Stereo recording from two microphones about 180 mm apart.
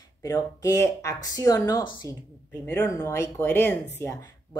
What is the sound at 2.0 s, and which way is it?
Speech, 20° right (ahead or behind).